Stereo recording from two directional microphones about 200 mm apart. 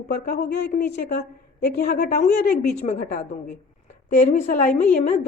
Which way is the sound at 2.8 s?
35° left (ahead or behind).